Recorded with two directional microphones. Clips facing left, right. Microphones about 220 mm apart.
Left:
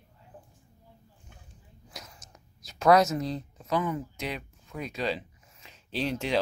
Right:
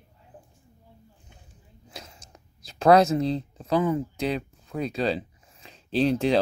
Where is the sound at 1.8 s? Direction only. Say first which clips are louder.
Right 3 dB; 25° right (ahead or behind).